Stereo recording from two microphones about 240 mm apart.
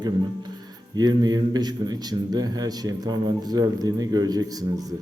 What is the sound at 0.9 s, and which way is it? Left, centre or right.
A man's voice, centre.